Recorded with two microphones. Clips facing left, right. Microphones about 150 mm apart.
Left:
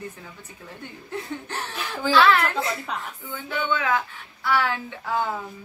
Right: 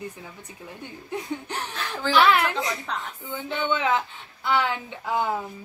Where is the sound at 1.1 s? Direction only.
15° right (ahead or behind).